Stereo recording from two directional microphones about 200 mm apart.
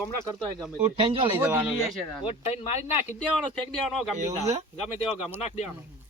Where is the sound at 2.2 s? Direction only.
30° left (ahead or behind).